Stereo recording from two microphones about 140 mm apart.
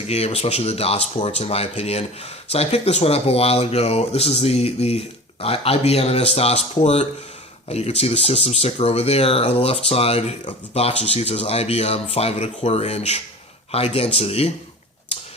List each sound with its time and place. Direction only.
0.1 s speech: 50° left (ahead or behind)